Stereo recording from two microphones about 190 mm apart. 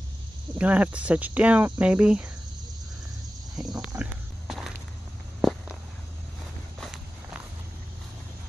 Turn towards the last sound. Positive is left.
turn(degrees=0)  # may be behind; listen again after turning